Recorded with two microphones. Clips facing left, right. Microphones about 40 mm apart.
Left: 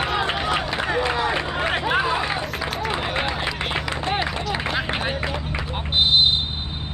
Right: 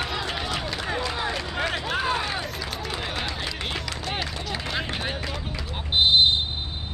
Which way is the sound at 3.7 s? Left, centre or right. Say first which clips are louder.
Left 6 dB; left.